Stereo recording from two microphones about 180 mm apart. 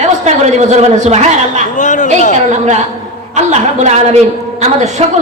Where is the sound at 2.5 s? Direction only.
40° right (ahead or behind).